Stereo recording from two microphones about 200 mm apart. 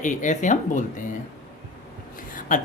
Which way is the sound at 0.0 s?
40° left (ahead or behind).